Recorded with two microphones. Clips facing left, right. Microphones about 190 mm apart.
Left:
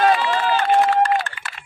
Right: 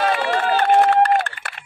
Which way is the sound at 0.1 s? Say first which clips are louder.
Even; 55° right (ahead or behind).